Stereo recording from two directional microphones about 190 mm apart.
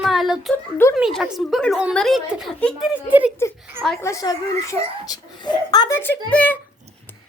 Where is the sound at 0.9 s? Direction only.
5° right (ahead or behind).